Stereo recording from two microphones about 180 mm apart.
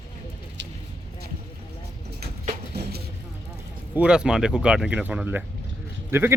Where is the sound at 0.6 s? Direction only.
75° right (ahead or behind).